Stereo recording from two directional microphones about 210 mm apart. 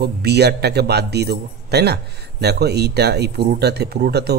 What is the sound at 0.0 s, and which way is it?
Speech, 50° right (ahead or behind).